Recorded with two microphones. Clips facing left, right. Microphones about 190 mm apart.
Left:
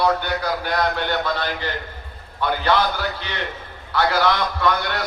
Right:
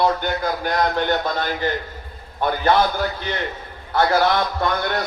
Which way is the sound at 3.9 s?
50° right (ahead or behind).